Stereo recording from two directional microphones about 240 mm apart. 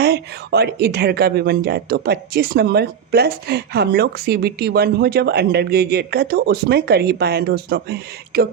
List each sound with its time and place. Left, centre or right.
0.0 s a woman's voice: right